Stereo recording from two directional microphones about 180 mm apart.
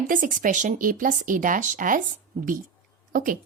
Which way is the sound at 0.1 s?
45° right (ahead or behind).